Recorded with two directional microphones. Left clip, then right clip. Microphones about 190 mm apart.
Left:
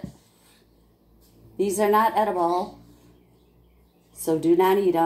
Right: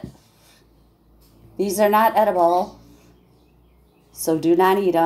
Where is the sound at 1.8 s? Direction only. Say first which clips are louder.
Right 5 dB; 20° right (ahead or behind).